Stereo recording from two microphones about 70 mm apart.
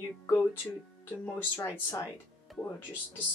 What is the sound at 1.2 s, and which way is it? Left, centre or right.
Speech, left.